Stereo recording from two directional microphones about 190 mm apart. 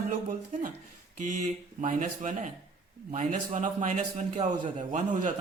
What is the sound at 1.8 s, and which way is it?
A man's voice, 40° right (ahead or behind).